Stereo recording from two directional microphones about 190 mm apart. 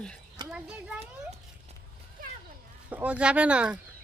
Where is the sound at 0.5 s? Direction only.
5° right (ahead or behind).